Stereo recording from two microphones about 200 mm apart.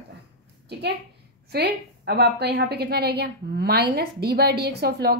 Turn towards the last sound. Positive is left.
turn(degrees=-55)  # may be behind; listen again after turning